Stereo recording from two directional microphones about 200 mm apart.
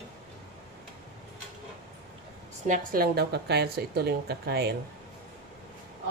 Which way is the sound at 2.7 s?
45° right (ahead or behind).